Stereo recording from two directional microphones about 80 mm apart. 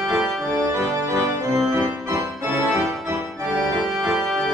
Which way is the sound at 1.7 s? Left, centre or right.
Right.